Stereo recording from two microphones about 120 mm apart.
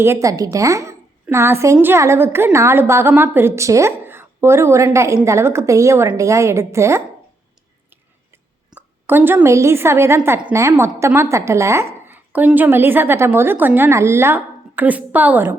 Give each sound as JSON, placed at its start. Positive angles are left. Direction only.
{"t": 0.0, "sound": "a woman's voice", "side_deg": -25}
{"t": 8.7, "sound": "a woman's voice", "side_deg": -15}